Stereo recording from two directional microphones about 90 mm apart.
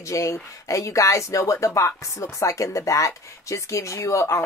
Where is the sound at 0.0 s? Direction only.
35° left (ahead or behind).